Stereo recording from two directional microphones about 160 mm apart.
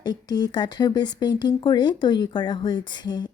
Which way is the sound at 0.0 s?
25° left (ahead or behind).